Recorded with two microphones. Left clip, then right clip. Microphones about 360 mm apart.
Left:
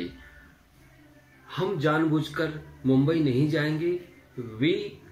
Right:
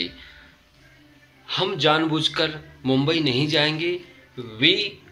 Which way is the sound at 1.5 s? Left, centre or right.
Centre.